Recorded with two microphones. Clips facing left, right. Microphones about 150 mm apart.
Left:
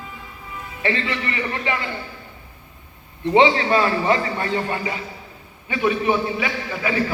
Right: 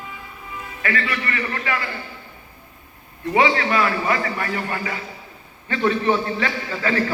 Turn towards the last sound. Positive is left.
turn(degrees=10)  # may be behind; listen again after turning